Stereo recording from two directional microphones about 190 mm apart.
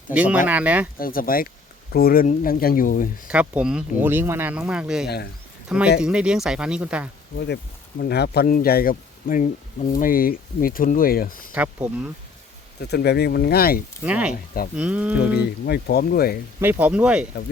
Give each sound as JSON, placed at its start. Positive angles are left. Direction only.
{"t": 0.1, "sound": "speech", "side_deg": -10}
{"t": 0.9, "sound": "speech", "side_deg": 50}
{"t": 3.2, "sound": "speech", "side_deg": -5}
{"t": 5.0, "sound": "speech", "side_deg": 60}
{"t": 5.6, "sound": "speech", "side_deg": -5}
{"t": 7.3, "sound": "speech", "side_deg": 60}
{"t": 11.5, "sound": "speech", "side_deg": -10}
{"t": 12.8, "sound": "speech", "side_deg": 60}
{"t": 14.0, "sound": "speech", "side_deg": -5}
{"t": 15.6, "sound": "speech", "side_deg": 55}
{"t": 16.6, "sound": "speech", "side_deg": -10}